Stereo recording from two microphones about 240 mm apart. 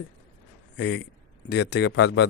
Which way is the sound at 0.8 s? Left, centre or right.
Left.